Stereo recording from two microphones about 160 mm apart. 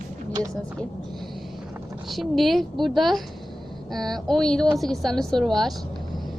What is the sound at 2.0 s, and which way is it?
A woman's voice, centre (ahead or behind).